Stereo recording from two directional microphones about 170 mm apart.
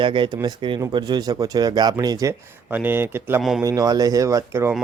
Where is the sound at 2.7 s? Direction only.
10° right (ahead or behind).